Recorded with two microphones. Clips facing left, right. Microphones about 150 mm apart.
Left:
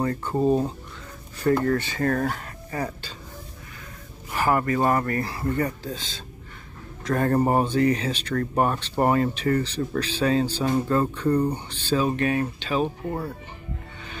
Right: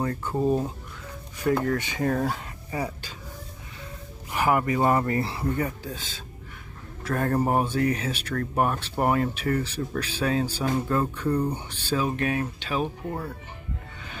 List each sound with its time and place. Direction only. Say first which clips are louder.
0.0 s speech: left 3 dB; centre (ahead or behind)
0.4 s speech: left 3 dB; 25° left (ahead or behind)
1.4 s speech: left 3 dB; 5° right (ahead or behind)
4.3 s speech: left 1 dB; 10° right (ahead or behind)
5.6 s speech: left 3 dB; 10° right (ahead or behind)